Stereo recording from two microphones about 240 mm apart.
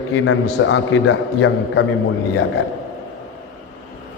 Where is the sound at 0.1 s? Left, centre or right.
Left.